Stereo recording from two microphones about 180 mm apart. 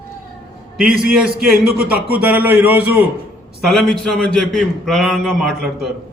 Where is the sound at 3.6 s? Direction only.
Centre (ahead or behind).